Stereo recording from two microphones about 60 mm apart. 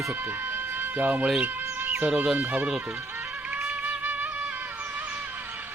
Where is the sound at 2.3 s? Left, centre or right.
Right.